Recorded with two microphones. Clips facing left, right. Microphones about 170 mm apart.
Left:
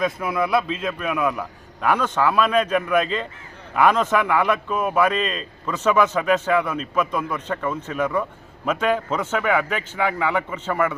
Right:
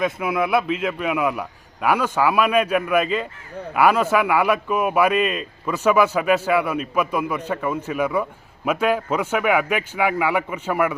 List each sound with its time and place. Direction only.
0.0 s a man's voice: 10° right (ahead or behind)